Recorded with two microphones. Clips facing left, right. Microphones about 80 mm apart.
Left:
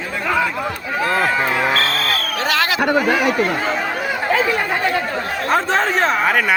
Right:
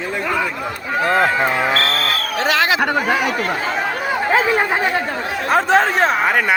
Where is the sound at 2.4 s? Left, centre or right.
Right.